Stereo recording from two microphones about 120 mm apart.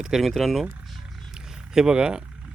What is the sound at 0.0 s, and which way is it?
Vehicle, centre (ahead or behind).